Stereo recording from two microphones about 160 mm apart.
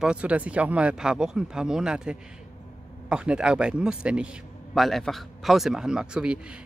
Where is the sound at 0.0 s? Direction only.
5° right (ahead or behind).